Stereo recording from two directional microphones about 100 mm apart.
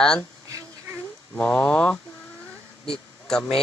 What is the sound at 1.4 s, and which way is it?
Speech, 10° left (ahead or behind).